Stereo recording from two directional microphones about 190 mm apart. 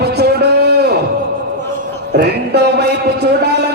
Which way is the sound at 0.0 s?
60° right (ahead or behind).